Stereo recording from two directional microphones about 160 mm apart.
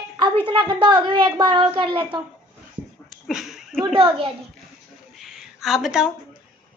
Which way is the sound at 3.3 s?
5° right (ahead or behind).